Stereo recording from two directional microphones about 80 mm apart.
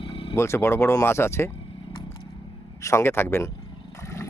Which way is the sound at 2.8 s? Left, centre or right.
Left.